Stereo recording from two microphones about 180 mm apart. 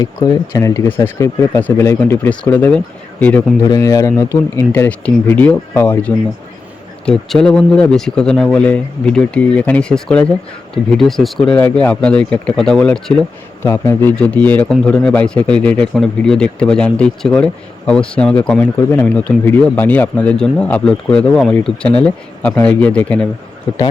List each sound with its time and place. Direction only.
0.0 s speech: 20° left (ahead or behind)
3.6 s a man's voice: 20° left (ahead or behind); by 13.1 s 5° left (ahead or behind)
13.6 s a man's voice: 15° left (ahead or behind)